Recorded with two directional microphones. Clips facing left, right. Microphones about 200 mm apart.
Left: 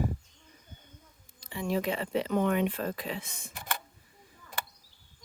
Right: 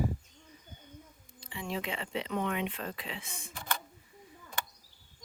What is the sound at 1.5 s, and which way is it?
Speech, 45° left (ahead or behind).